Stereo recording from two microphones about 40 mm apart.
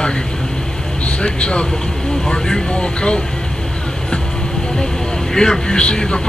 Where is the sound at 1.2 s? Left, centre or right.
Left.